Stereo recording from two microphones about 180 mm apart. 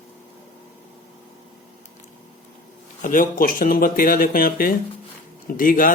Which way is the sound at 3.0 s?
45° left (ahead or behind).